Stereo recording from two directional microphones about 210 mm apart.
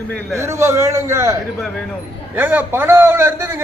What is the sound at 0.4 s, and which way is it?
A man's voice, 15° right (ahead or behind).